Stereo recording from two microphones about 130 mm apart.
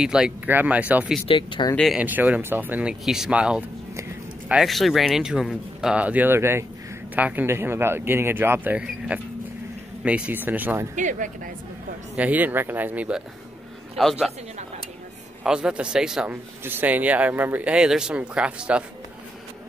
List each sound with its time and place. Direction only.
0.0 s speech: 5° right (ahead or behind)
1.2 s speech: 40° left (ahead or behind)
2.0 s speech: 10° right (ahead or behind)
11.0 s speech: 75° right (ahead or behind)
12.2 s speech: 10° right (ahead or behind)
14.0 s speech: centre (ahead or behind)
15.4 s speech: 5° right (ahead or behind)